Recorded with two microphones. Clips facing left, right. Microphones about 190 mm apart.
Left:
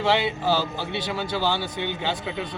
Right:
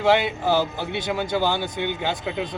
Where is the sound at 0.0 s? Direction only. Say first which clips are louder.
Right 3 dB; 15° right (ahead or behind).